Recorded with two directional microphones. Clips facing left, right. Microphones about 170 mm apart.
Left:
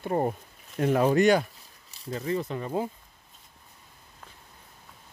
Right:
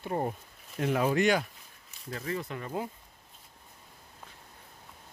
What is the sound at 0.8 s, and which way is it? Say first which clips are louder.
Speech: left 5 dB; 40° left (ahead or behind).